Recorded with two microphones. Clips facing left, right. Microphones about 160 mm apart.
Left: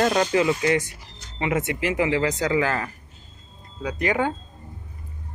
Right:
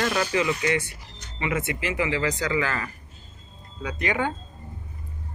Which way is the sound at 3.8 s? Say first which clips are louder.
Left 3 dB; 40° left (ahead or behind).